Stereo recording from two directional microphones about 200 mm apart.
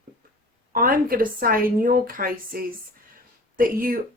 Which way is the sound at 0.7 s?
45° right (ahead or behind).